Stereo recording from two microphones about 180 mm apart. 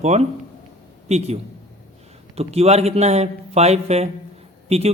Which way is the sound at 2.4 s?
35° right (ahead or behind).